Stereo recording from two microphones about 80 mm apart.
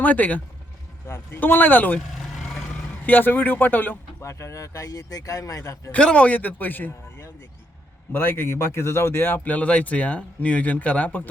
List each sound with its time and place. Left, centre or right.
0.0 s speech: left
1.0 s speech: left
2.0 s vehicle: centre
3.1 s speech: left
4.2 s a man's voice: left
5.9 s speech: centre